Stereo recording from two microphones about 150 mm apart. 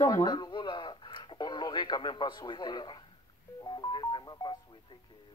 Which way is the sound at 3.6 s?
30° left (ahead or behind).